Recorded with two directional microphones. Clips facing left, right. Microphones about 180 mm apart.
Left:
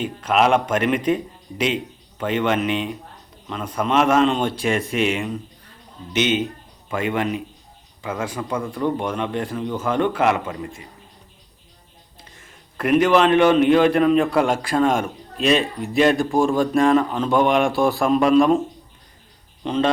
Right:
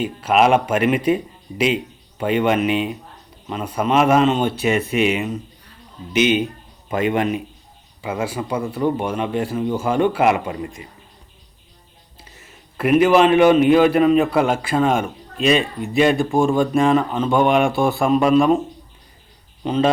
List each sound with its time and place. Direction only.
0.0 s a man's voice: 10° right (ahead or behind)
8.0 s speech: 10° right (ahead or behind)
12.3 s a man's voice: 5° right (ahead or behind)
19.6 s speech: 5° right (ahead or behind)